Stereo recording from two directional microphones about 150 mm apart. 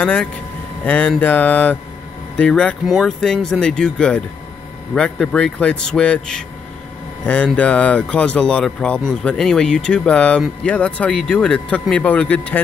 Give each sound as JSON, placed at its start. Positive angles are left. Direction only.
{"t": 0.0, "sound": "a man's voice", "side_deg": 10}